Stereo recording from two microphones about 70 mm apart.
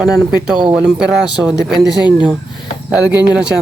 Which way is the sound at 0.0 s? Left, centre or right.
Centre.